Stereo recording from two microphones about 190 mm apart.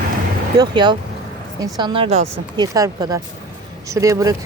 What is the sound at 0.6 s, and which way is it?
Speech, 20° right (ahead or behind).